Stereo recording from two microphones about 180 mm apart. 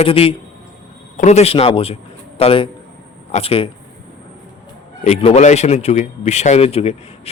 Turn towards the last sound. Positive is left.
turn(degrees=35)  # may be behind; listen again after turning